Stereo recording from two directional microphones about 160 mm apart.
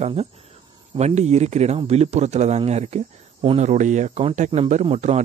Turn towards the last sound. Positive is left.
turn(degrees=-45)  # may be behind; listen again after turning